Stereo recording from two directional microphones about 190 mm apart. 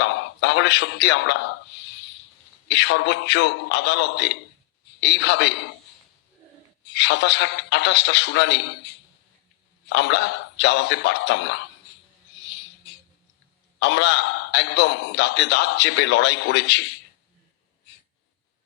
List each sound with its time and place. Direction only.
0.0 s a man's voice: 65° left (ahead or behind)
2.6 s a man's voice: 65° left (ahead or behind)
6.9 s a man's voice: 65° left (ahead or behind)
9.9 s a man's voice: 65° left (ahead or behind)
13.7 s a man's voice: 65° left (ahead or behind)